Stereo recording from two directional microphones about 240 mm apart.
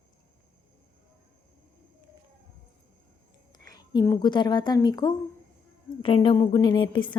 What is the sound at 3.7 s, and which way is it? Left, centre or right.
A woman's voice, centre.